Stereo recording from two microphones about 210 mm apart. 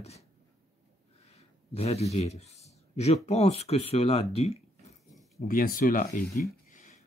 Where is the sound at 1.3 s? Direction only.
30° left (ahead or behind).